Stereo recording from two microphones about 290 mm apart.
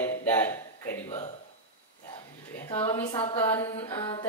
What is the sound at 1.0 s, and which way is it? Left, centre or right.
Speech, left.